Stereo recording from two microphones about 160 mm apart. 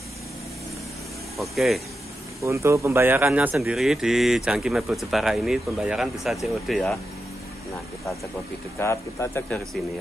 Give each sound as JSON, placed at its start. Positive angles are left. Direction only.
{"t": 1.4, "sound": "speech", "side_deg": 0}
{"t": 2.4, "sound": "speech", "side_deg": -20}
{"t": 8.7, "sound": "speech", "side_deg": 15}